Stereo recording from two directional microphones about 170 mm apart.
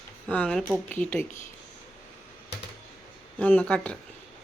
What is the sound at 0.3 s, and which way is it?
Speech, 5° left (ahead or behind).